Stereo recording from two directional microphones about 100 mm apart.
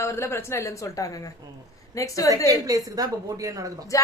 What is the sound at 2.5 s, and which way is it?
A woman's voice, 35° right (ahead or behind).